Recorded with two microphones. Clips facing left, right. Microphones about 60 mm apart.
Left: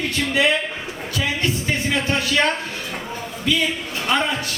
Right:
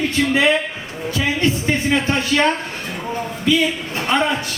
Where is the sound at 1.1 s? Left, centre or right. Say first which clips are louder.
Right 4 dB; right.